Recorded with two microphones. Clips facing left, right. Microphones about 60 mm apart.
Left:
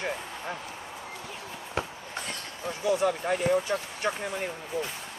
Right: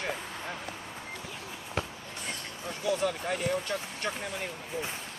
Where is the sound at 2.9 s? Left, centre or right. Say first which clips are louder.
Left 4 dB; centre.